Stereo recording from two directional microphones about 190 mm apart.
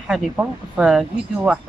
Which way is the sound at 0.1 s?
5° right (ahead or behind).